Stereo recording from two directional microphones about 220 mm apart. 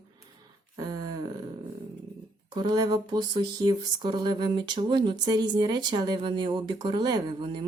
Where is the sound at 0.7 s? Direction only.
20° right (ahead or behind).